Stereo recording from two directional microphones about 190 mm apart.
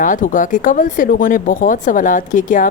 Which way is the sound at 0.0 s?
45° left (ahead or behind).